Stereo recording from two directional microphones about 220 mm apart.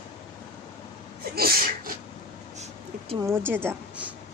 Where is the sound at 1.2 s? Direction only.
45° right (ahead or behind).